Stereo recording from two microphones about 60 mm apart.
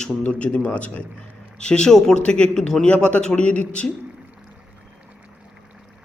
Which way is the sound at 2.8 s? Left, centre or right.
Centre.